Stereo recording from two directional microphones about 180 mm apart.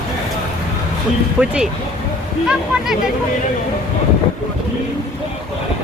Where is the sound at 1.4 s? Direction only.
5° right (ahead or behind).